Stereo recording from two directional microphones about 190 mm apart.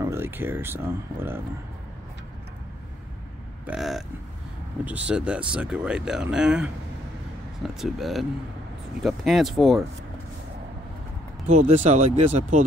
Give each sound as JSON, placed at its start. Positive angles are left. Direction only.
{"t": 0.0, "sound": "speech", "side_deg": -10}
{"t": 3.6, "sound": "speech", "side_deg": 0}
{"t": 11.4, "sound": "speech", "side_deg": -35}